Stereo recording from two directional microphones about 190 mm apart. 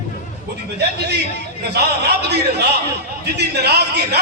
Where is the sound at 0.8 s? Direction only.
60° right (ahead or behind).